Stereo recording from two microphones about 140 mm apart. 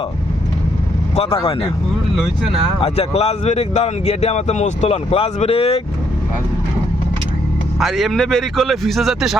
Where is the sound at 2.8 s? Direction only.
45° left (ahead or behind).